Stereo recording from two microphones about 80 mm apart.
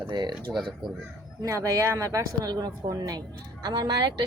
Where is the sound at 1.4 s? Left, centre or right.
Right.